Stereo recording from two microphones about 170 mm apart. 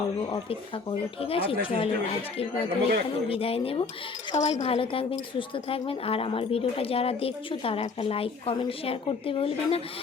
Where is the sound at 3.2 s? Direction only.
35° left (ahead or behind).